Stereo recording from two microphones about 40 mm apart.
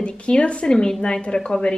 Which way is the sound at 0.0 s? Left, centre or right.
Left.